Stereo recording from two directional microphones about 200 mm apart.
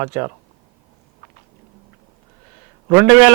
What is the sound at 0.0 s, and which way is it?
Speech, 15° right (ahead or behind).